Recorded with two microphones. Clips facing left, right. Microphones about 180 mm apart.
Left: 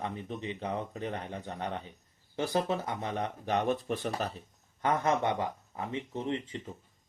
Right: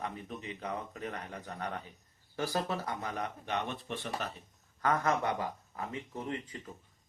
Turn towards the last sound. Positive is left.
turn(degrees=25)  # may be behind; listen again after turning